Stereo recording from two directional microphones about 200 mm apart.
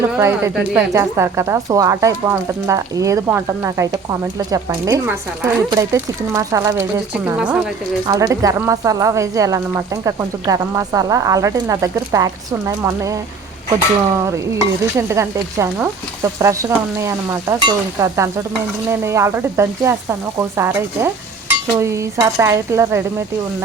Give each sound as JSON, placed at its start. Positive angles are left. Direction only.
{"t": 0.0, "sound": "speech", "side_deg": -15}
{"t": 8.0, "sound": "speech", "side_deg": -15}
{"t": 14.3, "sound": "speech", "side_deg": -15}